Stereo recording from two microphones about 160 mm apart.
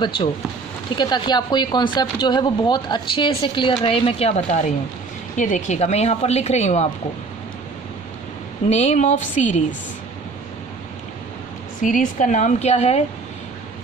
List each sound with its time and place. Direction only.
0.0 s a woman's voice: 30° left (ahead or behind)
8.6 s a woman's voice: 45° left (ahead or behind)
11.8 s a woman's voice: 55° left (ahead or behind)